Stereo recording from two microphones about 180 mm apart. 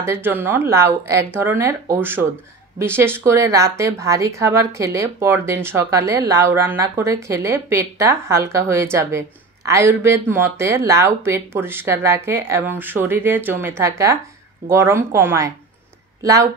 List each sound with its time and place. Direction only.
0.0 s a woman's voice: 15° right (ahead or behind)